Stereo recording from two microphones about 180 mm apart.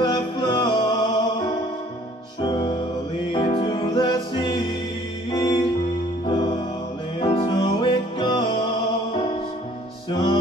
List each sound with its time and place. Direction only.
0.0 s music: 25° left (ahead or behind)
2.4 s music: 25° left (ahead or behind)